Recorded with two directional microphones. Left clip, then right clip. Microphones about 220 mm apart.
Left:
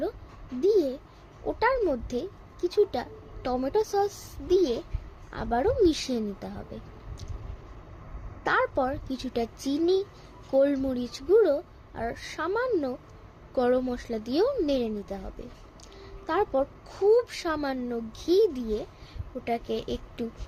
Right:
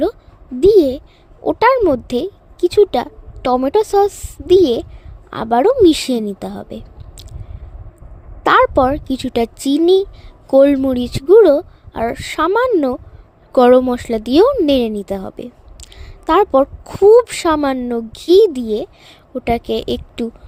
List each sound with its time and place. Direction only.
0.6 s a sound: 45° right (ahead or behind)
1.5 s a woman's voice: 40° right (ahead or behind)
8.4 s a woman's voice: 45° right (ahead or behind)